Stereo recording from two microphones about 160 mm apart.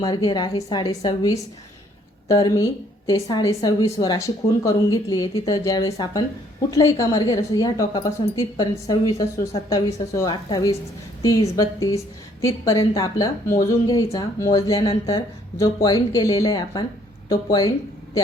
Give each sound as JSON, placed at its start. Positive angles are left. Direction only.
{"t": 0.0, "sound": "a woman's voice", "side_deg": 25}